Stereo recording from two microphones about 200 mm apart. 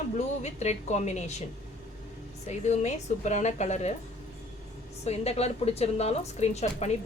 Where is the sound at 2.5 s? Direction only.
35° left (ahead or behind).